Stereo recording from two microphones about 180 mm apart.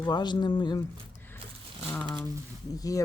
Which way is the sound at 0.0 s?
25° left (ahead or behind).